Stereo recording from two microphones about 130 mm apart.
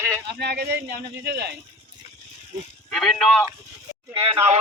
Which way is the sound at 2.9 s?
5° left (ahead or behind).